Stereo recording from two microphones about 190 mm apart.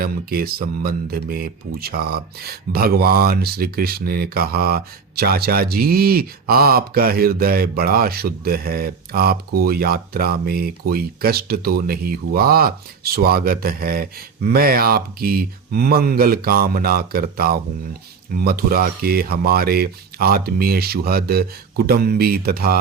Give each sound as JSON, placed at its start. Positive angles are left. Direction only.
{"t": 0.0, "sound": "speech", "side_deg": -50}